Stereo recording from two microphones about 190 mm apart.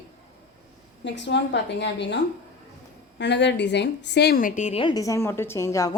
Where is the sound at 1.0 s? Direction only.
70° left (ahead or behind); by 4.8 s 40° left (ahead or behind).